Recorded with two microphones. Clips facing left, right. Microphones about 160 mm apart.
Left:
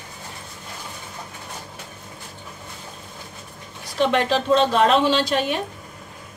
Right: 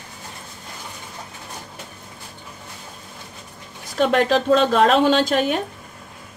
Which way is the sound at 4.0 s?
45° right (ahead or behind).